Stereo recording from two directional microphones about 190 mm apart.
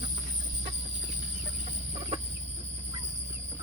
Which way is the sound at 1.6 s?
35° right (ahead or behind).